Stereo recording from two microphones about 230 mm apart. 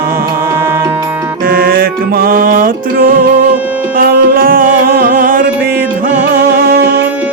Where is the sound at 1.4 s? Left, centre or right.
Right.